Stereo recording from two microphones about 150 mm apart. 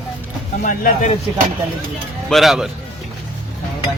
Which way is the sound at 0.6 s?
60° left (ahead or behind).